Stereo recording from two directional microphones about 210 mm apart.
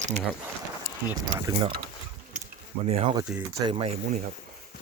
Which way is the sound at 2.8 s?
30° right (ahead or behind).